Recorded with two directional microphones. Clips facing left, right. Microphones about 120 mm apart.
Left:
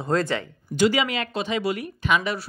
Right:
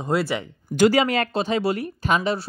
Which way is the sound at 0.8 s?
40° right (ahead or behind).